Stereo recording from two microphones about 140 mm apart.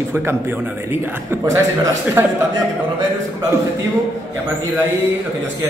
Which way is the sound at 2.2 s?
15° right (ahead or behind).